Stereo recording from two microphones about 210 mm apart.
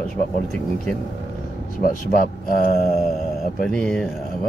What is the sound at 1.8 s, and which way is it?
Speech, 40° left (ahead or behind).